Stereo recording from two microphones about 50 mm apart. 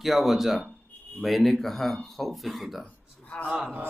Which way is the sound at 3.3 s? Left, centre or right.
Left.